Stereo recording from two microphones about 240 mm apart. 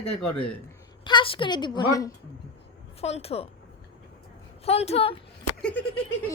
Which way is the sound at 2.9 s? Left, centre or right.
Left.